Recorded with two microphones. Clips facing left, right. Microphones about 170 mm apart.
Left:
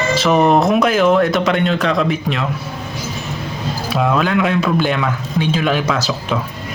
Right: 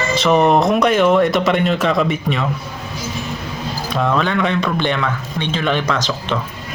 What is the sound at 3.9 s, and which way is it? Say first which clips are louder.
A man's voice: left 2 dB; 5° left (ahead or behind).